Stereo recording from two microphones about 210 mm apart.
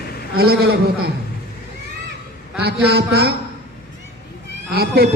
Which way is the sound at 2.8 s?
50° right (ahead or behind).